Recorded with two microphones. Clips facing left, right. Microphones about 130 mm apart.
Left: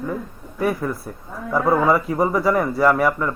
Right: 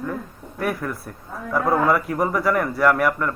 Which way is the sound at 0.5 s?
15° left (ahead or behind).